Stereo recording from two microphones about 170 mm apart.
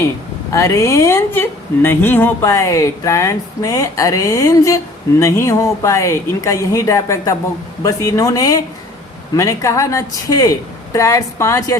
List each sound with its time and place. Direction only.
0.5 s speech: 15° left (ahead or behind)